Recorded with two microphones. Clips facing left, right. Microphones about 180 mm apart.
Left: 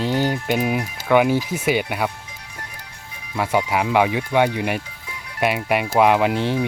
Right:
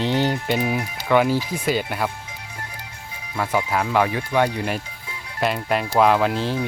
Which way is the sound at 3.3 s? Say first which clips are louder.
Left 2 dB; 10° left (ahead or behind).